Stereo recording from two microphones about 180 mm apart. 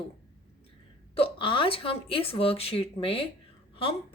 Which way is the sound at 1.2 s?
30° left (ahead or behind).